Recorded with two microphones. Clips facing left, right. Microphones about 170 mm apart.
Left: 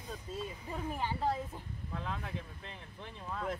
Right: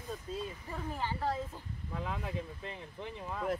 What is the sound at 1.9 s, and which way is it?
Speech, 15° right (ahead or behind).